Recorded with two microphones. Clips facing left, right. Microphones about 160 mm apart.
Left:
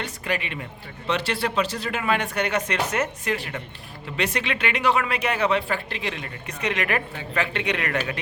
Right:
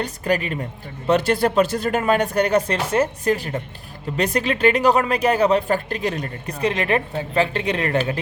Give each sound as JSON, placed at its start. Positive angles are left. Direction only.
{"t": 0.0, "sound": "a woman's voice", "side_deg": -40}